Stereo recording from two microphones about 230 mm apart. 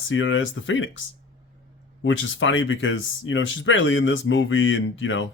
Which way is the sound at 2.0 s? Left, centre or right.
Left.